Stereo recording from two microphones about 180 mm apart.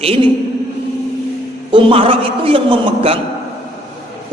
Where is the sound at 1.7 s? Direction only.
30° right (ahead or behind).